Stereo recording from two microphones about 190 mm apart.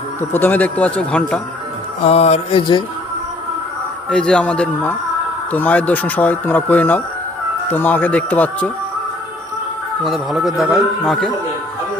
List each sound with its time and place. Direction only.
0.2 s speech: 10° left (ahead or behind)
2.0 s a sound: 35° left (ahead or behind)
4.1 s a man's voice: 5° left (ahead or behind)
10.0 s a man's voice: centre (ahead or behind)